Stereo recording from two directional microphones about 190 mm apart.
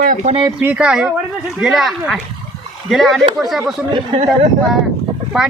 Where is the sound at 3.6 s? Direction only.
25° right (ahead or behind).